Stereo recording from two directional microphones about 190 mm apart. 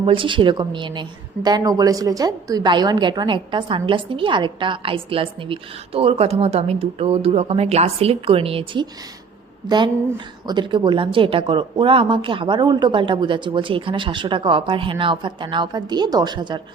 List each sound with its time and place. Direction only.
0.0 s a woman's voice: 25° right (ahead or behind)